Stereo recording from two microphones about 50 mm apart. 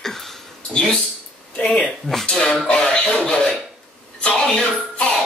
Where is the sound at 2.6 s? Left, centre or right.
Centre.